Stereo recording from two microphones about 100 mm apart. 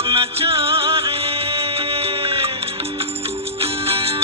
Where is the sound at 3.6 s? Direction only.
75° right (ahead or behind).